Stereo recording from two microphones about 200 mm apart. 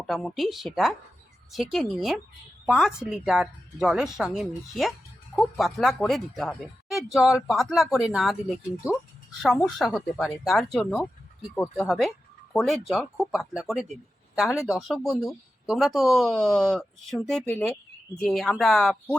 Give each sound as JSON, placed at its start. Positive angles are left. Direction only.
{"t": 0.0, "sound": "speech", "side_deg": 0}
{"t": 14.5, "sound": "speech", "side_deg": 15}
{"t": 14.8, "sound": "speech", "side_deg": 0}